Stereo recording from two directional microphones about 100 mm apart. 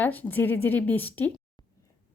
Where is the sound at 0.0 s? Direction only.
20° left (ahead or behind).